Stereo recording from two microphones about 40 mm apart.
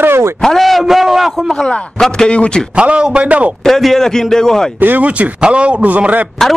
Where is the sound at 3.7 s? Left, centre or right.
Centre.